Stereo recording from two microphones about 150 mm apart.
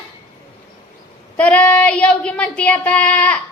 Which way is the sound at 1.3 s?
10° left (ahead or behind).